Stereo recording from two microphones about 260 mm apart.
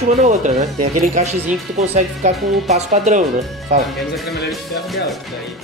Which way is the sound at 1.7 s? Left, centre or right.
Right.